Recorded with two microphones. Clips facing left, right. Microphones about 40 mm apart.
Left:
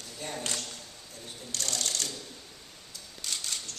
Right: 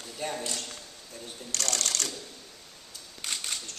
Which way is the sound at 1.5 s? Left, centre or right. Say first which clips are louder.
Right 2 dB; right.